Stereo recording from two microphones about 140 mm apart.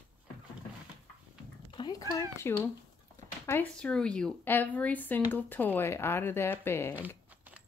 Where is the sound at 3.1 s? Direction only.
15° left (ahead or behind).